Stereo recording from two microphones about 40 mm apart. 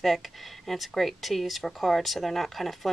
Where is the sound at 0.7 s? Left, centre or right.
Centre.